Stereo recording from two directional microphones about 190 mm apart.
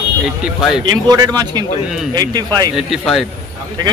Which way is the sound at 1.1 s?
20° right (ahead or behind).